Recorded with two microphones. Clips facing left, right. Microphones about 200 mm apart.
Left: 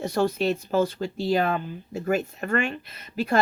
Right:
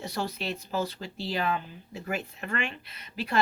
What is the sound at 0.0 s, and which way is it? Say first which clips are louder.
Speech: left 10 dB; 50° left (ahead or behind).